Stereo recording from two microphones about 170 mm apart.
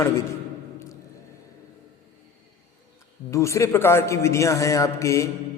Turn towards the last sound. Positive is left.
turn(degrees=15)  # may be behind; listen again after turning